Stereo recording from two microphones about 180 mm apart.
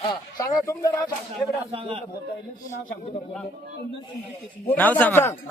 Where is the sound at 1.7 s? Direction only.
30° right (ahead or behind).